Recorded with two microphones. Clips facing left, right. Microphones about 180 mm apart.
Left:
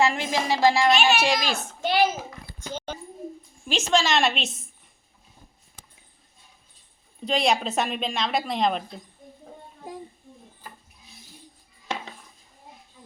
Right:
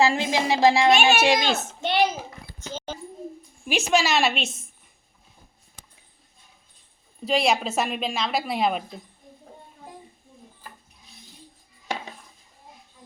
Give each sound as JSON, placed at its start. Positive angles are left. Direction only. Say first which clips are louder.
{"t": 0.0, "sound": "speech", "louder": "right 2 dB", "side_deg": -25}
{"t": 1.8, "sound": "a sound", "louder": "left 1 dB", "side_deg": 0}
{"t": 3.7, "sound": "a woman's voice", "louder": "right 1 dB", "side_deg": -10}
{"t": 7.3, "sound": "a woman's voice", "louder": "right 1 dB", "side_deg": 0}